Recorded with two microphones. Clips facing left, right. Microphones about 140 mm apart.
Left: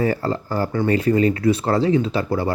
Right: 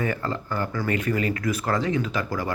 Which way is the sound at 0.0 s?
35° left (ahead or behind).